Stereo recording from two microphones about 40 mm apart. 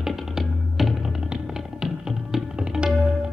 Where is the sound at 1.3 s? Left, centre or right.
Centre.